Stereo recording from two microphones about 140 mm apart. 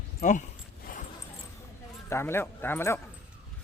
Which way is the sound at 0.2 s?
60° left (ahead or behind).